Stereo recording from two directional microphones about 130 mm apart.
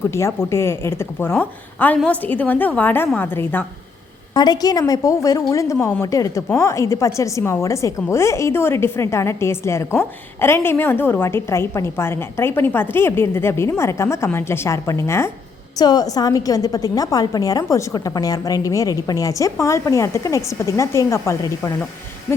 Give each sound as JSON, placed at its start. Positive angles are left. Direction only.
{"t": 0.0, "sound": "a woman's voice", "side_deg": 20}
{"t": 4.4, "sound": "a woman's voice", "side_deg": 30}
{"t": 15.7, "sound": "a woman's voice", "side_deg": 30}